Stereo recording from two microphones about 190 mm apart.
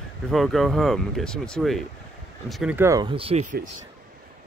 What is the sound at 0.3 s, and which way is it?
Speech, centre (ahead or behind).